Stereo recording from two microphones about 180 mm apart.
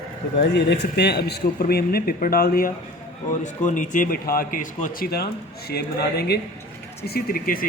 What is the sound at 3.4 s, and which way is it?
Speech, 45° left (ahead or behind).